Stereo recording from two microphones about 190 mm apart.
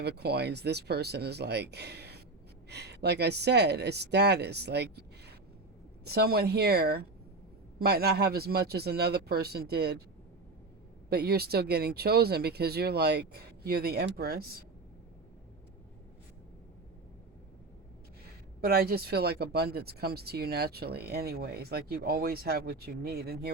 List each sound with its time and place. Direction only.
0.0 s speech: 60° right (ahead or behind)
11.1 s speech: 55° right (ahead or behind)
18.6 s speech: 55° right (ahead or behind)